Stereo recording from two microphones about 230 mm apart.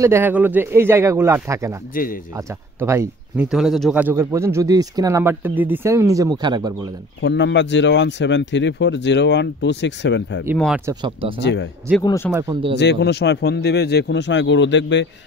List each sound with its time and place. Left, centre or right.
0.0 s speech: centre
7.2 s speech: left
10.9 s speech: centre
11.4 s speech: left
12.0 s speech: centre
12.3 s speech: centre
12.7 s speech: left